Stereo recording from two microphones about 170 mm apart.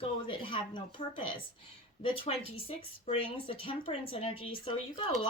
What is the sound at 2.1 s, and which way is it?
Speech, 35° left (ahead or behind).